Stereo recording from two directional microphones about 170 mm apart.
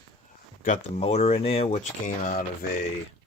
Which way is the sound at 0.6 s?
45° left (ahead or behind).